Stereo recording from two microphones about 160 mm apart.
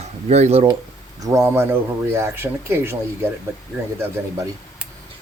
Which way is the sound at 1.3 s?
15° right (ahead or behind).